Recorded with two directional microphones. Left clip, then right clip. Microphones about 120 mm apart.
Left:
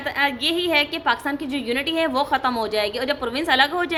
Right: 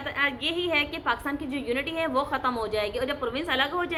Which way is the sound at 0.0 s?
40° left (ahead or behind).